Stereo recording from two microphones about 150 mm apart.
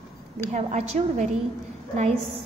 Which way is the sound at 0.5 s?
50° right (ahead or behind).